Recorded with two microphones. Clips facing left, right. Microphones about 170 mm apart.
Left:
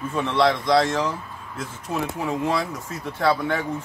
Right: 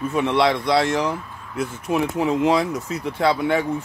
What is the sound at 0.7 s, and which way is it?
Speech, 10° right (ahead or behind).